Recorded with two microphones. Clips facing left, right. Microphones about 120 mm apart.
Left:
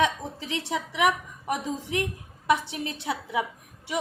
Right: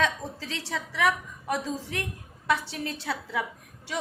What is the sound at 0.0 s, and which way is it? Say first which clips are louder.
A woman's voice: left 2 dB; 20° left (ahead or behind).